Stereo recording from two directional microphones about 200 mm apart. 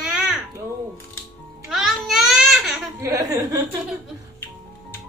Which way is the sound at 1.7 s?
Centre (ahead or behind).